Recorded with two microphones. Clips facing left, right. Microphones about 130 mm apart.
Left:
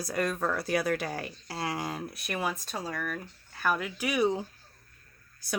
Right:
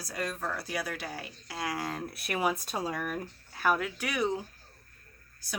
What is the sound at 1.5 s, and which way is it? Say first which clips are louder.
Speech: left 1 dB; 30° left (ahead or behind).